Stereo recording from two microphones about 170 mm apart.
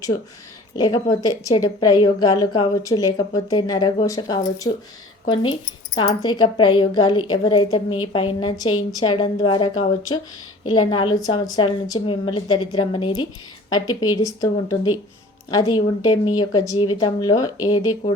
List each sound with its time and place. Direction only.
0.8 s a woman's voice: 25° left (ahead or behind)
6.2 s a woman's voice: 25° left (ahead or behind)